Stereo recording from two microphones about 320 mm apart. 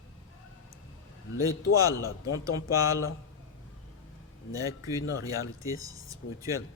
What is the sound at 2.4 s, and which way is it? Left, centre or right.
Speech, centre.